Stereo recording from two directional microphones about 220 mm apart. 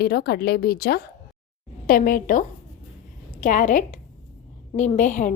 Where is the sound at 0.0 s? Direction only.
45° left (ahead or behind).